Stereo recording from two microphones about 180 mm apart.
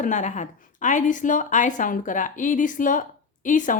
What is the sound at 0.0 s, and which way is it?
A woman's voice, 45° left (ahead or behind).